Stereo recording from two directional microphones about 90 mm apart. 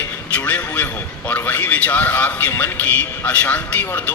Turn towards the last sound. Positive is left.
turn(degrees=20)  # may be behind; listen again after turning